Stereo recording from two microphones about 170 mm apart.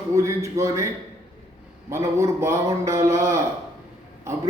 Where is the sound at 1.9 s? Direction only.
15° right (ahead or behind).